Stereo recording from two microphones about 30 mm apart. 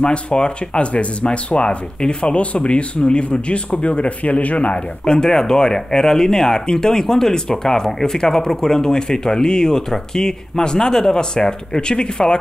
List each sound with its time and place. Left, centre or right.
0.0 s speech: left
5.0 s speech: left